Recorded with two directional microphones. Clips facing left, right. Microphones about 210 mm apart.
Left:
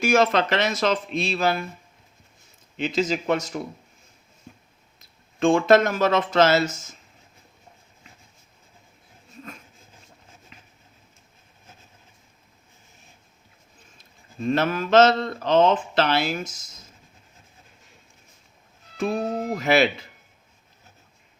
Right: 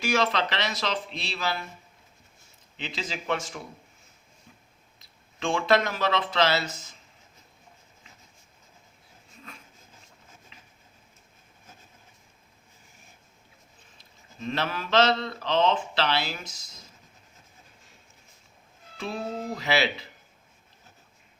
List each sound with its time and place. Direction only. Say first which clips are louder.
0.0 s speech: left 6 dB; 45° left (ahead or behind)
2.7 s speech: left 12 dB; 45° left (ahead or behind)
4.9 s speech: left 12 dB; 45° left (ahead or behind)
14.0 s speech: left 7 dB; 45° left (ahead or behind)
18.9 s speech: left 7 dB; 45° left (ahead or behind)